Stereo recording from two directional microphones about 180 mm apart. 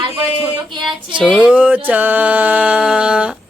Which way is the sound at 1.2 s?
5° right (ahead or behind).